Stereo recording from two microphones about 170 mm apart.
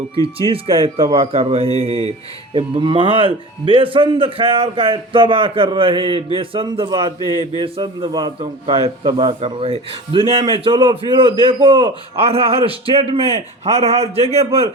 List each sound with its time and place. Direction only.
0.4 s a man's voice: 30° right (ahead or behind)